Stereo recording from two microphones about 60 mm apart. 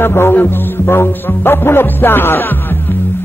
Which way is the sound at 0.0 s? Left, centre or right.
Left.